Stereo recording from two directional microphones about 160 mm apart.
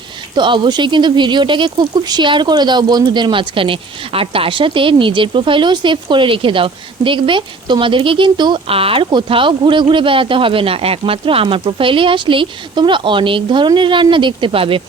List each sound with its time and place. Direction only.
0.3 s speech: 30° right (ahead or behind)